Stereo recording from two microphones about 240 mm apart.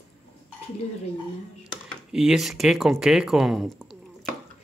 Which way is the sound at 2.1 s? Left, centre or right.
Centre.